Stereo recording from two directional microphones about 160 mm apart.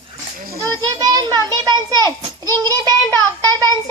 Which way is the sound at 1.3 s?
25° right (ahead or behind).